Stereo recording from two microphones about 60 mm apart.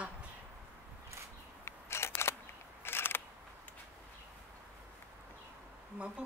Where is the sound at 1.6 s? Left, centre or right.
Left.